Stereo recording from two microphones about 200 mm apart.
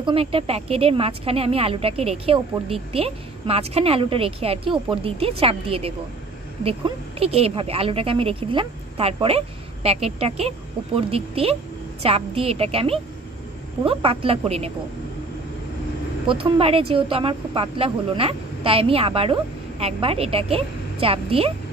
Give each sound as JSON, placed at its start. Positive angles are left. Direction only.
{"t": 0.0, "sound": "a woman's voice", "side_deg": -25}
{"t": 16.3, "sound": "a woman's voice", "side_deg": -25}